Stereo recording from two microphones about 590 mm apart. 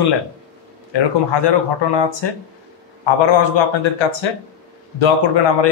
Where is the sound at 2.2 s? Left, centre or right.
Left.